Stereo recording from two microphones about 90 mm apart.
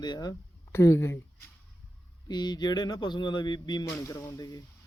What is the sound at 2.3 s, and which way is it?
A man's voice, 50° left (ahead or behind).